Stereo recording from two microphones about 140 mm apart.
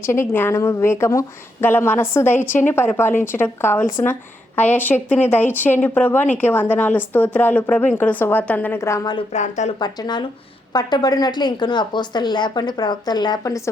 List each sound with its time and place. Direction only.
0.0 s a woman's voice: 20° left (ahead or behind)
9.3 s speech: 55° left (ahead or behind)
9.8 s a woman's voice: 30° left (ahead or behind)